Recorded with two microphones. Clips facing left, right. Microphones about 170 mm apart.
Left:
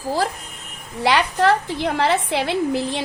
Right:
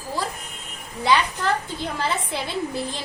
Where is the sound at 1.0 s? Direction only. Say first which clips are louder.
Left 4 dB; 75° left (ahead or behind).